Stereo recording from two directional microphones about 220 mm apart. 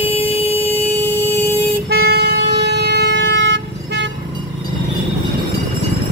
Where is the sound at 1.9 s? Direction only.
45° right (ahead or behind).